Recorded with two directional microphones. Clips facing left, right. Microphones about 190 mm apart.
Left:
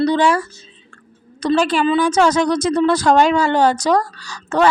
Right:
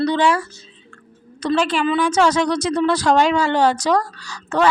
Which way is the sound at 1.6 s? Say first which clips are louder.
Left 3 dB; 40° left (ahead or behind).